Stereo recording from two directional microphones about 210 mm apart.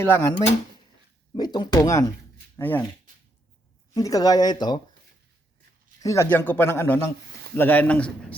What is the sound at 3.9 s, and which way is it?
Speech, 15° left (ahead or behind).